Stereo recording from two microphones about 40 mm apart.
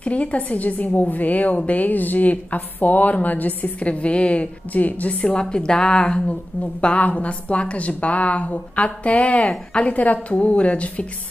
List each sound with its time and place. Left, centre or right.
0.0 s a woman's voice: left
5.2 s a woman's voice: left
6.6 s a woman's voice: left
9.9 s a woman's voice: left